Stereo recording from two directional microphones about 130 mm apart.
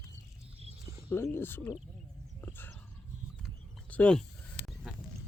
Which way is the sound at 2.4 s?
15° left (ahead or behind).